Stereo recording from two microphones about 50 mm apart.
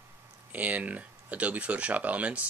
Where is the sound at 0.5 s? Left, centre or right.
Right.